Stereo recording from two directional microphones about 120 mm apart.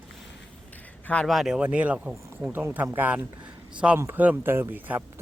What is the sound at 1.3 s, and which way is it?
Speech, centre (ahead or behind).